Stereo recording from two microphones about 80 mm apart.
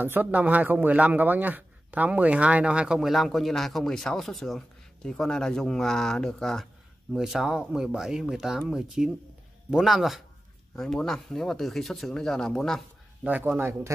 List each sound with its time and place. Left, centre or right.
0.0 s speech: right; by 12.8 s centre
13.2 s speech: centre
13.6 s speech: right